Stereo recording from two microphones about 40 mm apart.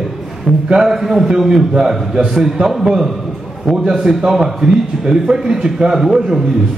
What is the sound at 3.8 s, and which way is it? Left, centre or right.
A man's voice, centre.